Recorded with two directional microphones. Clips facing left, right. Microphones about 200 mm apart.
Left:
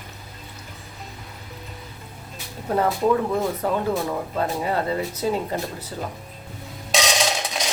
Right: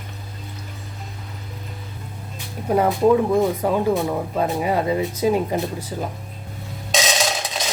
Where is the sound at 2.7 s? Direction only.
15° right (ahead or behind).